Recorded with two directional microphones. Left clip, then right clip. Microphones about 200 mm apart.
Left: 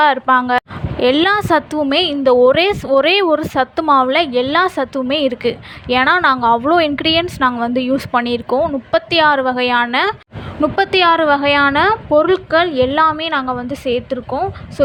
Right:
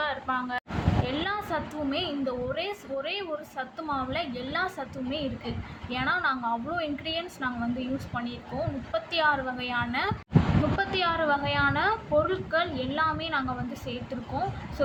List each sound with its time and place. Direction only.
0.0 s a woman's voice: 55° left (ahead or behind)